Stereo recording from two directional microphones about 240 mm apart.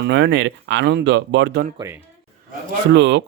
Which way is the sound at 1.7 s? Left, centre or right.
Centre.